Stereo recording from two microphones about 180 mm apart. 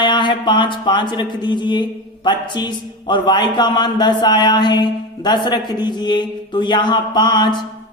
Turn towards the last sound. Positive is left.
turn(degrees=25)  # may be behind; listen again after turning